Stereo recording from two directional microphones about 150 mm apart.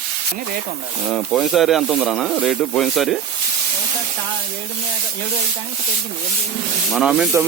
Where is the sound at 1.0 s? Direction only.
5° left (ahead or behind).